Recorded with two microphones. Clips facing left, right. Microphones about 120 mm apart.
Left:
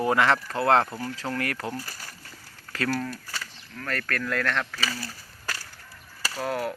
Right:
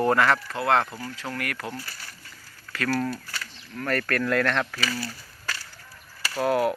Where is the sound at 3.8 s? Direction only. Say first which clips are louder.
Right 5 dB; 5° right (ahead or behind).